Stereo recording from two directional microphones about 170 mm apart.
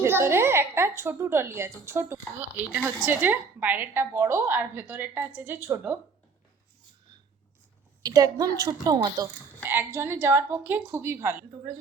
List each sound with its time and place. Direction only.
0.0 s a woman's voice: 15° right (ahead or behind)
8.0 s a woman's voice: 20° right (ahead or behind)